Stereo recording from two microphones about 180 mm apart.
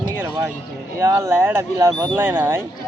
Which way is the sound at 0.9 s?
15° right (ahead or behind).